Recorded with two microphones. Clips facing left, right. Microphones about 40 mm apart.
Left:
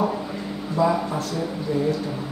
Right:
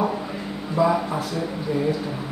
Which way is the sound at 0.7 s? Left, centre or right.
Centre.